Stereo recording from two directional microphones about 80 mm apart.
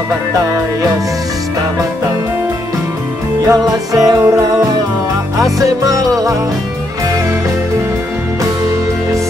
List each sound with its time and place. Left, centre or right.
3.4 s music: right